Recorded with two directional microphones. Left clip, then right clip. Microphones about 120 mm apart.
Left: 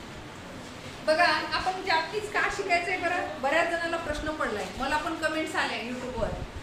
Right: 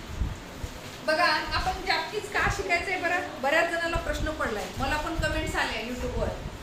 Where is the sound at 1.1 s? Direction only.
35° left (ahead or behind).